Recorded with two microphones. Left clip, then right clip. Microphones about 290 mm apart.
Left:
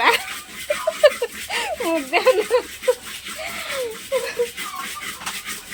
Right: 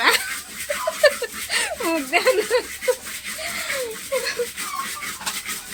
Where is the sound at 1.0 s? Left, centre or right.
Centre.